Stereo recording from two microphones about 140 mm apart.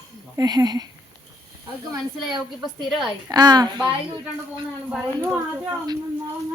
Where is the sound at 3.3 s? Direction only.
30° right (ahead or behind).